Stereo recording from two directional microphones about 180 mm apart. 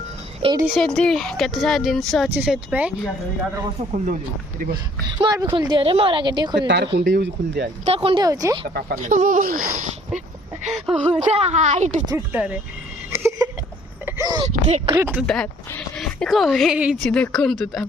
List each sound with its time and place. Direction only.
0.6 s a woman's voice: centre (ahead or behind)
3.9 s speech: 45° right (ahead or behind)
5.0 s speech: 25° right (ahead or behind)
6.7 s speech: 75° right (ahead or behind)
7.9 s speech: 30° right (ahead or behind)
8.7 s speech: 50° right (ahead or behind)
10.7 s a woman's voice: centre (ahead or behind)
11.2 s a woman's voice: 40° right (ahead or behind)
12.0 s speech: 10° right (ahead or behind)
13.1 s a sound: 15° right (ahead or behind)
14.4 s a sound: 35° right (ahead or behind)
14.9 s speech: 10° right (ahead or behind)
15.3 s a woman's voice: 5° left (ahead or behind)